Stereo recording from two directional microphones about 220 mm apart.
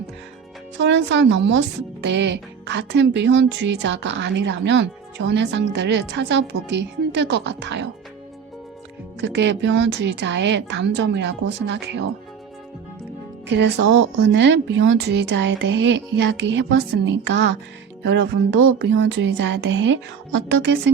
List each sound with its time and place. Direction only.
0.8 s a woman's voice: 55° right (ahead or behind)
9.2 s a woman's voice: 55° right (ahead or behind)
13.5 s a woman's voice: 50° right (ahead or behind)
18.0 s music: 55° right (ahead or behind)